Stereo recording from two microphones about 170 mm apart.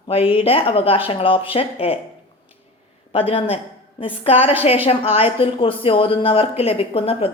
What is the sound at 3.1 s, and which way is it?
A woman's voice, 30° left (ahead or behind).